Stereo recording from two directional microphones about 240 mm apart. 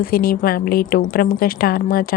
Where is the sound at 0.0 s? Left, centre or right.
Left.